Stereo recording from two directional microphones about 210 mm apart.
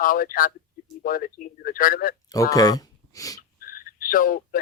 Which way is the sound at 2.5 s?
15° left (ahead or behind).